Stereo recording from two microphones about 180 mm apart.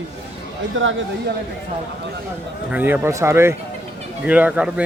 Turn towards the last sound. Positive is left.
turn(degrees=-5)  # may be behind; listen again after turning